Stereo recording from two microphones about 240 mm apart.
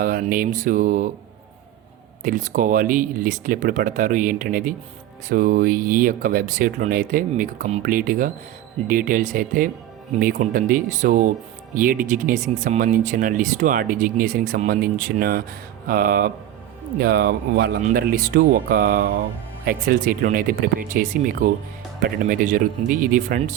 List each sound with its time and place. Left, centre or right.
0.0 s speech: right
2.2 s speech: right